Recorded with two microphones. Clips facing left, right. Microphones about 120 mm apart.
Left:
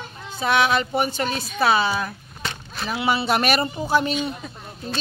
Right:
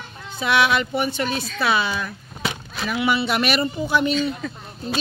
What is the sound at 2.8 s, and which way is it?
Speech, 35° left (ahead or behind).